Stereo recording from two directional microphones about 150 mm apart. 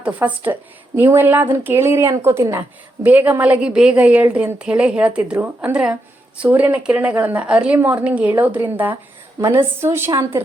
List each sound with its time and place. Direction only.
0.0 s speech: 10° right (ahead or behind)